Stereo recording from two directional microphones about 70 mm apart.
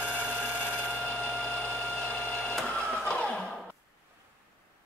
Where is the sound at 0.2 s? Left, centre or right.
Left.